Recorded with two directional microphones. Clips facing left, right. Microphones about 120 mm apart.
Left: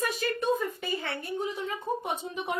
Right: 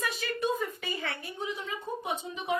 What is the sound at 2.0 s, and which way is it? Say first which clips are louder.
Speech: left 1 dB; 55° left (ahead or behind).